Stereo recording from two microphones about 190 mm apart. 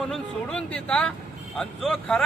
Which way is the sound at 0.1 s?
5° left (ahead or behind).